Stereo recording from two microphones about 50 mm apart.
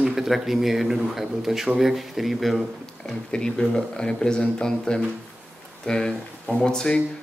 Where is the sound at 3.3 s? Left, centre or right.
Centre.